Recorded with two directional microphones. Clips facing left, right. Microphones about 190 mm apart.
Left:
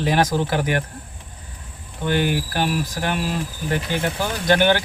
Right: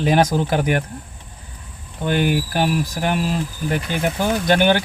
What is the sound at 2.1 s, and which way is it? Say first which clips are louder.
Speech: right 2 dB; 15° right (ahead or behind).